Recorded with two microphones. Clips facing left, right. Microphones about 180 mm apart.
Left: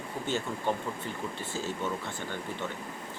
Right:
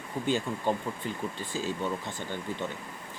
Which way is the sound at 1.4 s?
15° right (ahead or behind).